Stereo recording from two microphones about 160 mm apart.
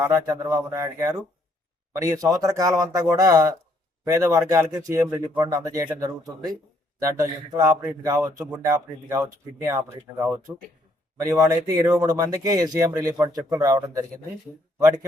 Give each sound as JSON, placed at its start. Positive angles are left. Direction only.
{"t": 0.0, "sound": "speech", "side_deg": -20}